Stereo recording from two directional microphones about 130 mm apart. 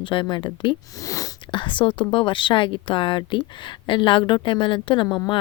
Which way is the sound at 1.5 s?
40° left (ahead or behind).